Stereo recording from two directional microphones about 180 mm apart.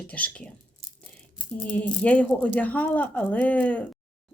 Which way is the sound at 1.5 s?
10° left (ahead or behind).